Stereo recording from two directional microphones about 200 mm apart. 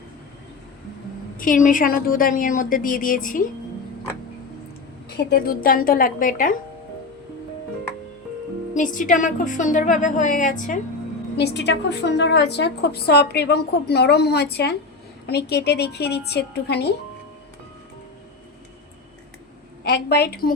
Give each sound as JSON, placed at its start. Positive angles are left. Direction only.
{"t": 1.4, "sound": "speech", "side_deg": 40}
{"t": 5.1, "sound": "speech", "side_deg": 50}
{"t": 8.7, "sound": "a woman's voice", "side_deg": 40}
{"t": 11.3, "sound": "a woman's voice", "side_deg": 55}
{"t": 19.8, "sound": "speech", "side_deg": 55}